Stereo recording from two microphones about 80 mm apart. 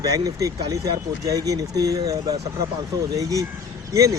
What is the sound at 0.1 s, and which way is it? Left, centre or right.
Speech, right.